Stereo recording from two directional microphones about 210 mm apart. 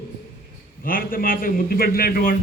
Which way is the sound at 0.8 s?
40° left (ahead or behind).